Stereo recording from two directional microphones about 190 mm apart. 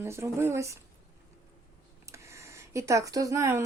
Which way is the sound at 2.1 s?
15° right (ahead or behind).